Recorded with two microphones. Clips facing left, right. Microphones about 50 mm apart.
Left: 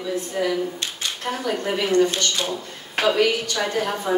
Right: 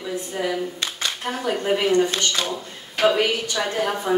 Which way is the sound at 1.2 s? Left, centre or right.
Centre.